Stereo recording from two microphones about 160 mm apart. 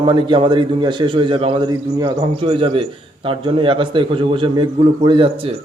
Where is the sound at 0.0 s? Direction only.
30° right (ahead or behind).